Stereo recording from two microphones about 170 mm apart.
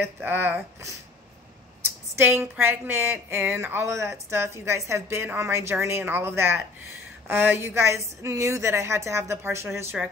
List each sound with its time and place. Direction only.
0.0 s speech: 15° right (ahead or behind)